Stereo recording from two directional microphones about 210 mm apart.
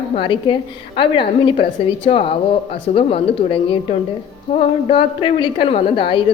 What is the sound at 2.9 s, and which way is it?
A woman's voice, 25° left (ahead or behind).